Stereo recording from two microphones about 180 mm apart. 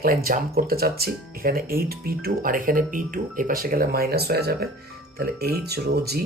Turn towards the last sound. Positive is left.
turn(degrees=-65)  # may be behind; listen again after turning